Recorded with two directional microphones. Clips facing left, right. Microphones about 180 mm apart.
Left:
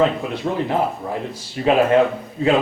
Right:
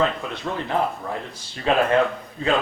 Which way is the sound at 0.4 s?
30° left (ahead or behind).